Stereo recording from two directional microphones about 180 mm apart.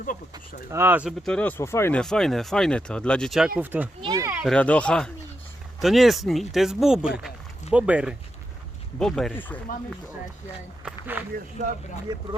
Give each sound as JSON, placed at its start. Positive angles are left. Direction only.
{"t": 0.7, "sound": "a child's voice", "side_deg": -10}
{"t": 1.2, "sound": "speech", "side_deg": 5}
{"t": 2.0, "sound": "a child's voice", "side_deg": 5}
{"t": 4.4, "sound": "a child's voice", "side_deg": 5}
{"t": 10.8, "sound": "a sound", "side_deg": -10}
{"t": 12.1, "sound": "speech", "side_deg": -25}